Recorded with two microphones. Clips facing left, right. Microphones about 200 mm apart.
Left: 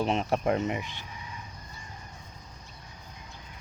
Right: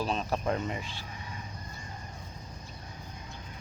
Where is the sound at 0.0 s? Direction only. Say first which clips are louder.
Left 4 dB; 25° left (ahead or behind).